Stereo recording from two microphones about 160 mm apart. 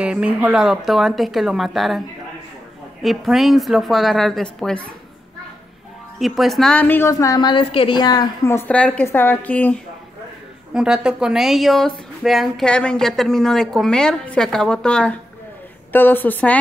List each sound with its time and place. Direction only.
0.0 s a woman's voice: 5° right (ahead or behind)
6.1 s a woman's voice: centre (ahead or behind); by 8.3 s 25° left (ahead or behind)
8.5 s a woman's voice: 10° left (ahead or behind)
10.7 s a woman's voice: 5° right (ahead or behind)